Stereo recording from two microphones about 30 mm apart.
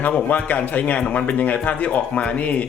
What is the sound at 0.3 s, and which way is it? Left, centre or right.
Speech, left.